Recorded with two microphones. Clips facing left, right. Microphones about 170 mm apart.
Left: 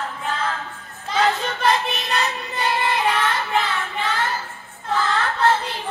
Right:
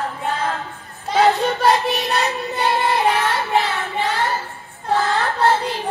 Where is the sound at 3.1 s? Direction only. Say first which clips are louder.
Right 3 dB; 35° right (ahead or behind).